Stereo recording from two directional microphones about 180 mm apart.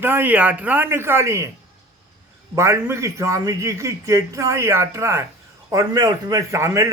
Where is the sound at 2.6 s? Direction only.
15° right (ahead or behind).